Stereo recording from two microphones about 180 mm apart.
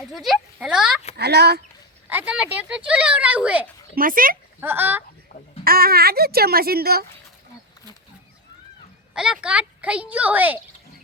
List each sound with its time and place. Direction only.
0.0 s a child's voice: centre (ahead or behind)
1.1 s speech: 65° right (ahead or behind)
2.0 s speech: 10° right (ahead or behind)
3.9 s speech: 50° right (ahead or behind)
4.6 s speech: 10° right (ahead or behind)
5.3 s speech: 40° left (ahead or behind)
5.6 s speech: 55° right (ahead or behind)
9.1 s speech: 5° right (ahead or behind)